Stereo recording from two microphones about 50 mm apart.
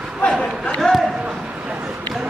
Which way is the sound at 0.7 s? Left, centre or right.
Centre.